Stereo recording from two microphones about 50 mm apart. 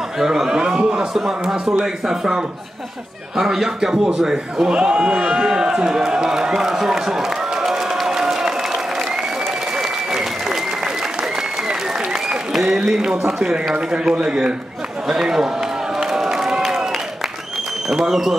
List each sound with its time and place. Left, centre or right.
0.2 s a sound: centre
1.4 s a man's voice: centre
9.8 s applause: centre
12.1 s applause: centre
13.4 s a man's voice: centre
16.0 s a sound: centre
17.8 s a man's voice: centre